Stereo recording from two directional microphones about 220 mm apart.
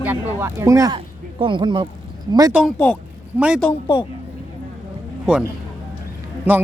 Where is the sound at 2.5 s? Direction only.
5° left (ahead or behind).